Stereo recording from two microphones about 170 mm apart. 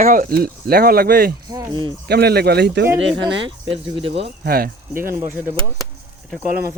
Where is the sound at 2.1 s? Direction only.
70° right (ahead or behind).